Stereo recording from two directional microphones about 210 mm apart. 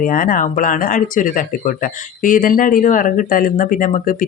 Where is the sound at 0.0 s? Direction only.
40° left (ahead or behind).